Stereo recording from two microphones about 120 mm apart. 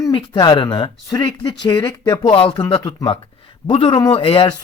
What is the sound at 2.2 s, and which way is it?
Speech, 50° left (ahead or behind).